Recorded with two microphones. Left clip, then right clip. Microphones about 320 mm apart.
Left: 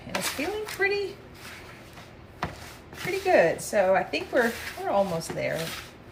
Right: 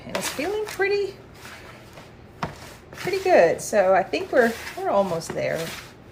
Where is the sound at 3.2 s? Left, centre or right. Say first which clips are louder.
Right 4 dB; centre.